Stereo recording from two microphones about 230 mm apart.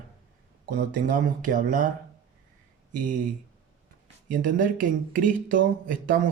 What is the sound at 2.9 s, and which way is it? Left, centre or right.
Speech, right.